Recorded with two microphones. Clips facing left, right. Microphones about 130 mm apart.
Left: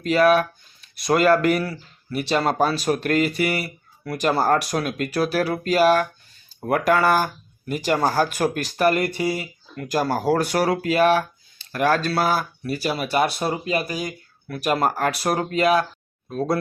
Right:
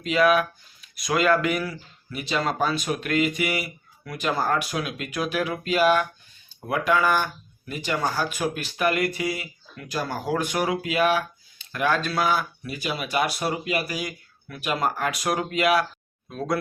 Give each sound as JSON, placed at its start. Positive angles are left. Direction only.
{"t": 0.0, "sound": "speech", "side_deg": 40}
{"t": 14.4, "sound": "speech", "side_deg": 40}